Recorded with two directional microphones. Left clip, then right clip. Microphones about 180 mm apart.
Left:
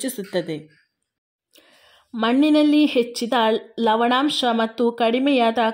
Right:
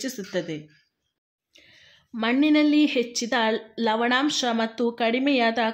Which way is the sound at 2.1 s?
30° left (ahead or behind).